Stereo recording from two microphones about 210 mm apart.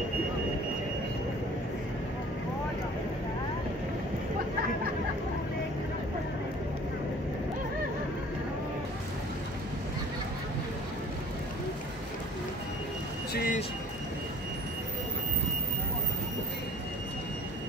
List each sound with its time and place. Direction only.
13.3 s vehicle: 45° left (ahead or behind)